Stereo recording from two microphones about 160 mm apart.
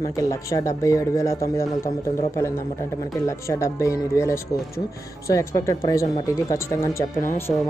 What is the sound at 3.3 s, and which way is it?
Speech, 20° left (ahead or behind).